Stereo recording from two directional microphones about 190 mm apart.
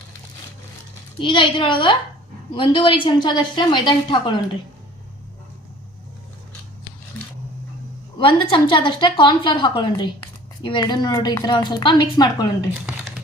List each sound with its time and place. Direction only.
1.2 s a woman's voice: 25° left (ahead or behind)
8.2 s a woman's voice: 25° left (ahead or behind)
12.8 s a sound: 5° right (ahead or behind)